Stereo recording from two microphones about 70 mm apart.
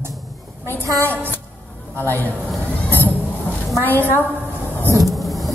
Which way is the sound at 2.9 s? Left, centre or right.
Left.